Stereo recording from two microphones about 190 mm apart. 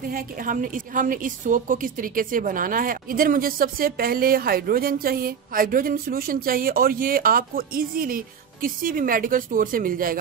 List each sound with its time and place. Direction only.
0.1 s a woman's voice: 45° right (ahead or behind)